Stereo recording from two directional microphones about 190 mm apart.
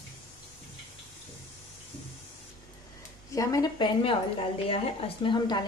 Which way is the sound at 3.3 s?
15° left (ahead or behind).